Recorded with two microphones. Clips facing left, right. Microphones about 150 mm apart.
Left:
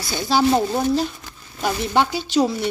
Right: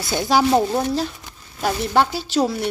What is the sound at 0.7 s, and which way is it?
Speech, centre (ahead or behind).